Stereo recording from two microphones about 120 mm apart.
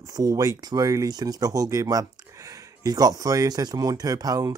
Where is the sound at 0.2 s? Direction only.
30° right (ahead or behind).